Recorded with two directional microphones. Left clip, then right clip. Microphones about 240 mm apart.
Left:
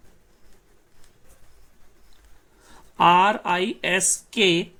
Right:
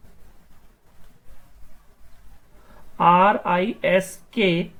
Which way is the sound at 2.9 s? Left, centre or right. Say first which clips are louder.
Right 1 dB; left.